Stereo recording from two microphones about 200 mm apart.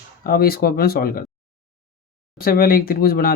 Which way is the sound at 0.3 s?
50° left (ahead or behind).